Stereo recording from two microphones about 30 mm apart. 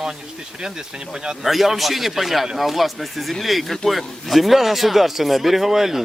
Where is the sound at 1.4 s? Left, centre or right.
Centre.